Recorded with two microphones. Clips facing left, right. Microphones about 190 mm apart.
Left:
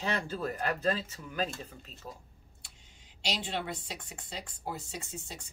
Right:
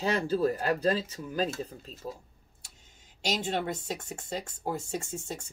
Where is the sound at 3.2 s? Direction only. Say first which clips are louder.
Right 5 dB; 45° right (ahead or behind).